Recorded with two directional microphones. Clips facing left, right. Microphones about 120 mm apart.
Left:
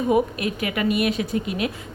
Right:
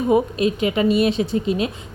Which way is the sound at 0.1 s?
25° right (ahead or behind).